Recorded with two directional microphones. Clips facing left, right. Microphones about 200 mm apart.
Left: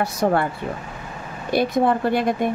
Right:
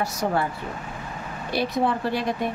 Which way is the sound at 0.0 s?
60° left (ahead or behind).